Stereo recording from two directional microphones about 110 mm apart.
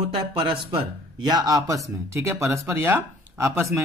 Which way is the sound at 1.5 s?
30° right (ahead or behind).